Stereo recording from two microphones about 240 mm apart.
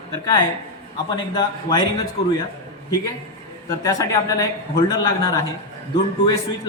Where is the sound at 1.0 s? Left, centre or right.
Centre.